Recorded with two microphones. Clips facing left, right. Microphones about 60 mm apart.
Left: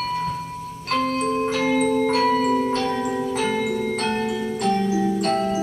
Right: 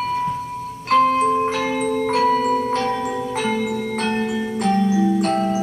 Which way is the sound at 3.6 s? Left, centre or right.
Centre.